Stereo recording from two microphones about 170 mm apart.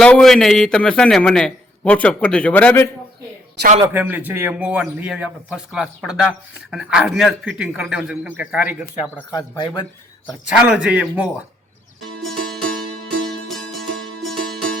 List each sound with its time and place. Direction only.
0.0 s a man's voice: 5° left (ahead or behind)
3.9 s a man's voice: 10° right (ahead or behind)
9.3 s speech: 25° left (ahead or behind)
10.7 s a man's voice: 5° right (ahead or behind)
12.2 s music: centre (ahead or behind)